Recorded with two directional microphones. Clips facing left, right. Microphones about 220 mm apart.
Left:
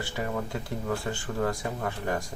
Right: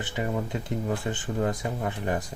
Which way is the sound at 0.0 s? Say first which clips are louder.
Right 2 dB; 20° right (ahead or behind).